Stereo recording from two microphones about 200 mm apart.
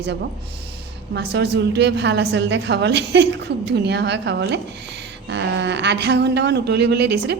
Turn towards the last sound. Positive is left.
turn(degrees=-60)  # may be behind; listen again after turning